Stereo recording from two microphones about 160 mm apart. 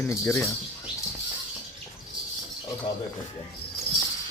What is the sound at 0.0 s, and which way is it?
Speech, 15° left (ahead or behind).